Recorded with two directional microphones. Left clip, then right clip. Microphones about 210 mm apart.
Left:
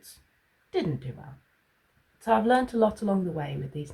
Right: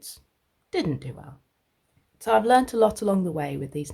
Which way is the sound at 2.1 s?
45° right (ahead or behind).